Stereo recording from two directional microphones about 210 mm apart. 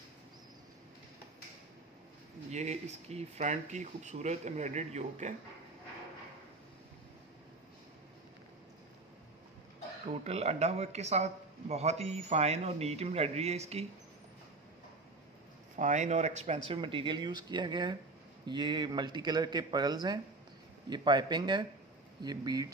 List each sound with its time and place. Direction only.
2.5 s speech: 30° right (ahead or behind)
10.2 s speech: 30° right (ahead or behind)
15.7 s speech: 35° right (ahead or behind); by 22.7 s 20° right (ahead or behind)